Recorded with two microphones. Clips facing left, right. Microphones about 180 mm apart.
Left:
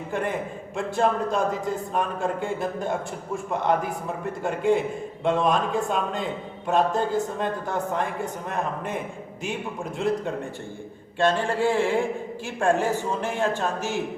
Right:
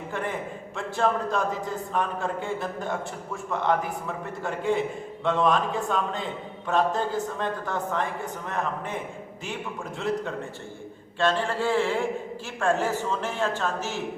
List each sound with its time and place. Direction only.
0.8 s speech: 15° left (ahead or behind)
11.2 s speech: 15° left (ahead or behind)